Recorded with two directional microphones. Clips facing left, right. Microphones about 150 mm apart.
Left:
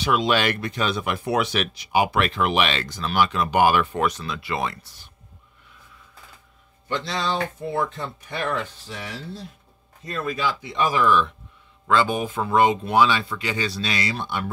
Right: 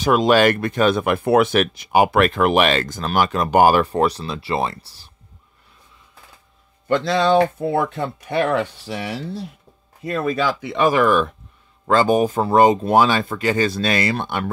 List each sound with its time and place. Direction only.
0.0 s speech: 45° right (ahead or behind)
6.9 s speech: 60° right (ahead or behind)